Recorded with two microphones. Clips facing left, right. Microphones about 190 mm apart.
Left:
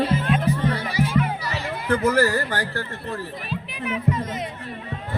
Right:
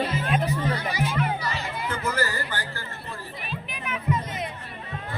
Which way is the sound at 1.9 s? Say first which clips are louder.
Left 10 dB; 70° left (ahead or behind).